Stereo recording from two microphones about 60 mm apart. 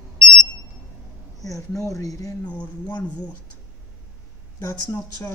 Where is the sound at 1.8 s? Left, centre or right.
Left.